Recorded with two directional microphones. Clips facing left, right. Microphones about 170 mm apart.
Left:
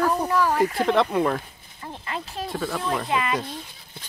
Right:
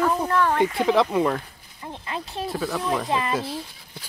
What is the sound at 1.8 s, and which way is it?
Speech, 20° right (ahead or behind).